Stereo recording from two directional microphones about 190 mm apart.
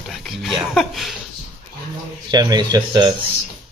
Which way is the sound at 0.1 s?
Centre (ahead or behind).